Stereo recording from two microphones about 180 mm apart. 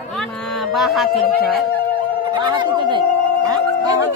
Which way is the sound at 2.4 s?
25° right (ahead or behind).